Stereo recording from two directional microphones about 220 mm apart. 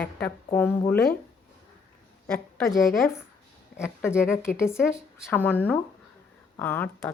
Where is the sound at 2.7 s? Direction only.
Centre (ahead or behind).